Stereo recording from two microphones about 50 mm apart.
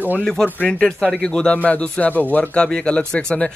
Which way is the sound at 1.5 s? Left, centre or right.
Left.